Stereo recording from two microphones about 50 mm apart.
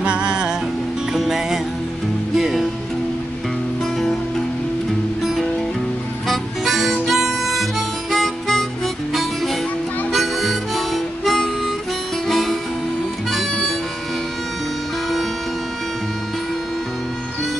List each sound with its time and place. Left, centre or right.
0.0 s music: right
1.1 s music: centre
6.2 s harmonica: centre
9.1 s music: centre
10.1 s harmonica: centre
12.3 s music: centre
13.3 s harmonica: centre